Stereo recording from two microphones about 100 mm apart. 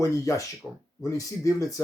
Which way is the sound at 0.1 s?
35° left (ahead or behind).